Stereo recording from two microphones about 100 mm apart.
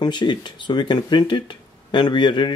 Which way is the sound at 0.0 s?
50° left (ahead or behind).